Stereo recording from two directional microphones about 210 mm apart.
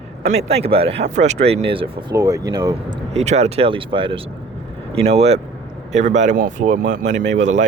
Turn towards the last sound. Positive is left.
turn(degrees=-35)  # may be behind; listen again after turning